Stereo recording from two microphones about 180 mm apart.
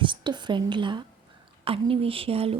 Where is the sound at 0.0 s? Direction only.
25° right (ahead or behind).